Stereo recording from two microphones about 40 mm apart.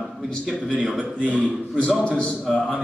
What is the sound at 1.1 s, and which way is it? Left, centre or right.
Speech, right.